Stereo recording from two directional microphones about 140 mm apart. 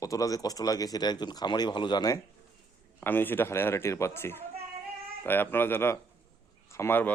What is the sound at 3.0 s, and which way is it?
A man's voice, 15° left (ahead or behind).